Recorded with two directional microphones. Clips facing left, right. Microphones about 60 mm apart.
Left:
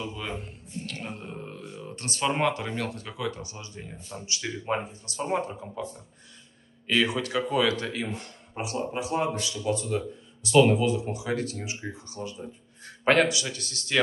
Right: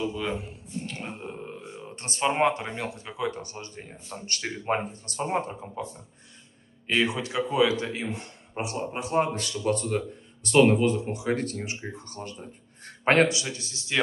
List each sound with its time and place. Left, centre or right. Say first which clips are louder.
0.0 s speech: right 5 dB; centre; by 3.3 s right
3.3 s speech: right 1 dB; right
5.2 s speech: even; right
6.9 s speech: left 1 dB; right
9.4 s speech: right 2 dB; right
13.0 s speech: right 1 dB; right; by 14.0 s centre